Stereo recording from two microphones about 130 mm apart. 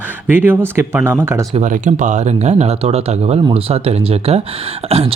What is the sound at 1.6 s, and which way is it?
Speech, 70° right (ahead or behind).